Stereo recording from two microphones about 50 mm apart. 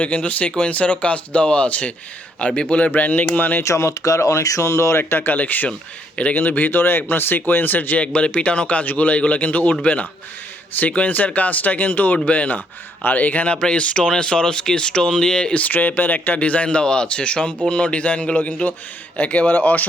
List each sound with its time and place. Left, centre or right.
0.0 s speech: left
3.6 s speech: left
4.9 s speech: left
8.0 s speech: left
13.6 s speech: centre
15.5 s speech: left